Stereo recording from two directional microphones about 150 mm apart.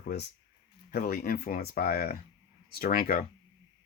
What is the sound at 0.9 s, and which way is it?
Speech, 90° left.